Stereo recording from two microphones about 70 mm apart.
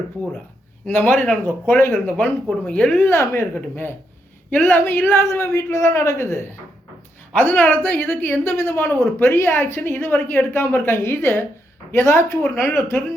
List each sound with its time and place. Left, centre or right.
0.9 s a woman's voice: left
2.6 s speech: centre
3.1 s a woman's voice: left
5.2 s a woman's voice: left
7.3 s a woman's voice: left